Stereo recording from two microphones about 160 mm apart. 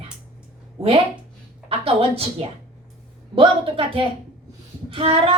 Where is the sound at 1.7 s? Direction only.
35° right (ahead or behind).